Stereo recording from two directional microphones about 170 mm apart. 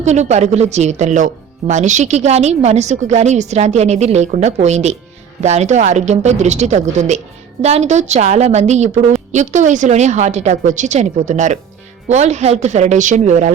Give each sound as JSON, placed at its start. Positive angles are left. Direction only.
{"t": 0.0, "sound": "a woman's voice", "side_deg": -40}